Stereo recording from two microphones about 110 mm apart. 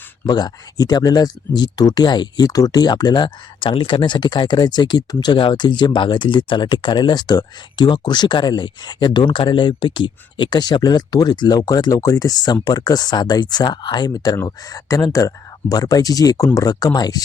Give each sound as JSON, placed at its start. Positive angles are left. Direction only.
{"t": 0.3, "sound": "speech", "side_deg": 40}